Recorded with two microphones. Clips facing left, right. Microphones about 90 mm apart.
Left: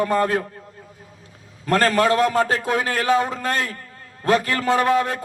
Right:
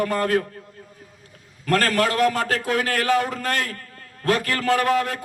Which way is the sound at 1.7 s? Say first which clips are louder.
Left 3 dB; 25° left (ahead or behind).